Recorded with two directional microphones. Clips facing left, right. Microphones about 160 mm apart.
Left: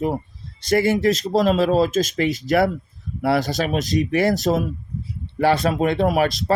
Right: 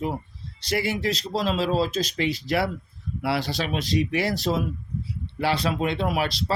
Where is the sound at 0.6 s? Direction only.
50° left (ahead or behind).